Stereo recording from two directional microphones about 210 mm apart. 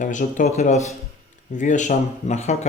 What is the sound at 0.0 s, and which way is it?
Speech, 35° left (ahead or behind).